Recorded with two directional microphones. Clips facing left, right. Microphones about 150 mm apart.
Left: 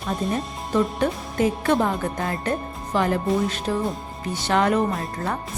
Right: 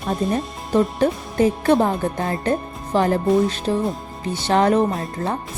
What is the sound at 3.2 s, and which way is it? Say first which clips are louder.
Speech: right 5 dB; centre (ahead or behind).